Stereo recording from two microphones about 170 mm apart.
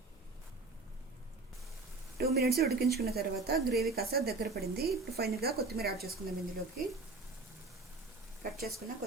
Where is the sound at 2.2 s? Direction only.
65° right (ahead or behind).